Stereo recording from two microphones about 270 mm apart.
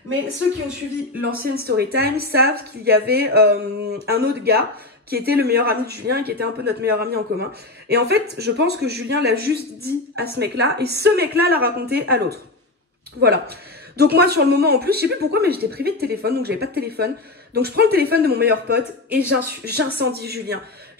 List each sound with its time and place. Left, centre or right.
1.2 s speech: right